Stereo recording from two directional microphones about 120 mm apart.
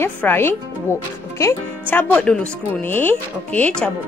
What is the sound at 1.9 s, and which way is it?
Speech, 15° left (ahead or behind).